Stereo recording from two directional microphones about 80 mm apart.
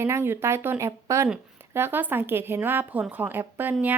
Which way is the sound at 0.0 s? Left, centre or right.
Right.